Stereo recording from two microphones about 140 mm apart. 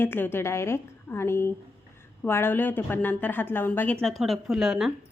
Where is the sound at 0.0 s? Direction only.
15° left (ahead or behind).